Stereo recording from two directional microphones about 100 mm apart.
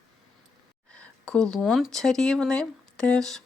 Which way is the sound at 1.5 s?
Centre (ahead or behind).